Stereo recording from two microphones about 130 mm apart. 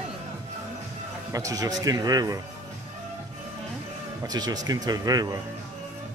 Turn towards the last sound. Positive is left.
turn(degrees=-30)  # may be behind; listen again after turning